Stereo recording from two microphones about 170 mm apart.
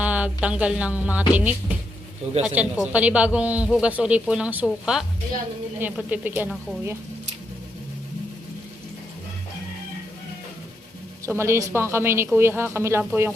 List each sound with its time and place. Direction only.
0.0 s a sound: 10° right (ahead or behind)
0.4 s a woman's voice: 5° right (ahead or behind)
2.3 s speech: 40° right (ahead or behind)
2.6 s a woman's voice: 5° right (ahead or behind)
11.3 s a woman's voice: 15° right (ahead or behind)